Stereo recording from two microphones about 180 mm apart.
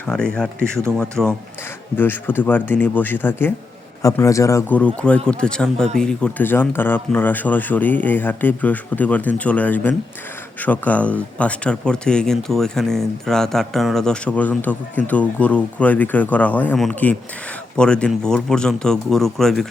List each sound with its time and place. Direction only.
0.0 s speech: 5° left (ahead or behind)